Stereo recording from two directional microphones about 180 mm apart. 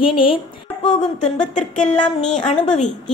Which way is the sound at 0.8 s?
40° left (ahead or behind).